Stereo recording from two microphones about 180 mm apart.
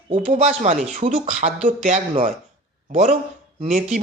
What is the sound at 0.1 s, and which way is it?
Speech, 40° right (ahead or behind).